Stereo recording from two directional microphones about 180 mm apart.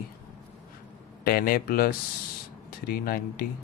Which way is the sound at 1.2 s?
55° left (ahead or behind).